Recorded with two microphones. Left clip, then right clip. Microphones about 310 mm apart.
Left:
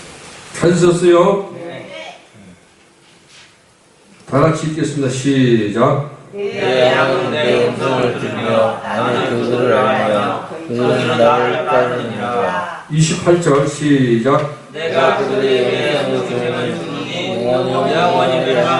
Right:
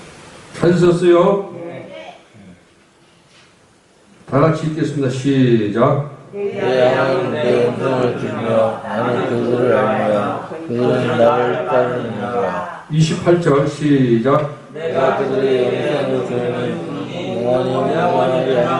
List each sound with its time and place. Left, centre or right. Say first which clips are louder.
0.6 s speech: left 1 dB; centre
4.3 s a man's voice: left 1 dB; centre
4.5 s a man's voice: left 1 dB; centre
14.3 s a sound: left 1 dB; centre
17.4 s a sound: even; centre
17.8 s speech: left 3 dB; centre